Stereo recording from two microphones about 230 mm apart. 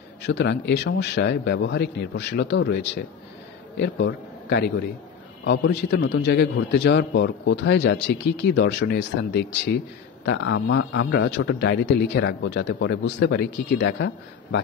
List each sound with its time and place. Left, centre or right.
0.2 s a man's voice: left